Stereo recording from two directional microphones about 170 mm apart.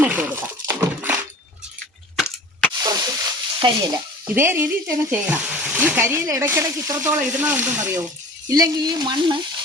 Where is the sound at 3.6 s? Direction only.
20° right (ahead or behind).